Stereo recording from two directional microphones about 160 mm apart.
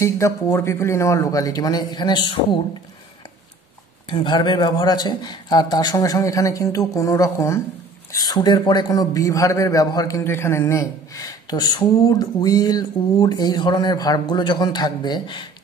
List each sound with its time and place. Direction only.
0.0 s a man's voice: 15° left (ahead or behind)
4.1 s a man's voice: 30° left (ahead or behind)